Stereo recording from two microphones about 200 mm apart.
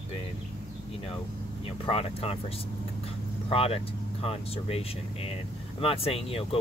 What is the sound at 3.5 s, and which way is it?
Speech, 30° left (ahead or behind).